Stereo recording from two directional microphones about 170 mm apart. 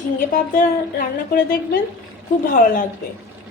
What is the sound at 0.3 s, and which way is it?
A woman's voice, 55° left (ahead or behind).